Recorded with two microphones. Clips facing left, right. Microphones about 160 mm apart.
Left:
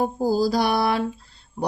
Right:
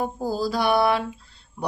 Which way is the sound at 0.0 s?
35° left (ahead or behind).